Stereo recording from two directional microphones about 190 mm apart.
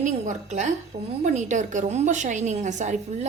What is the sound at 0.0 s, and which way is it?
Speech, 40° right (ahead or behind).